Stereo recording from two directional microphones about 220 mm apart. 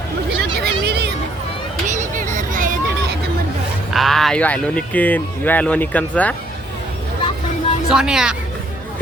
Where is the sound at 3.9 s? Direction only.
Centre (ahead or behind).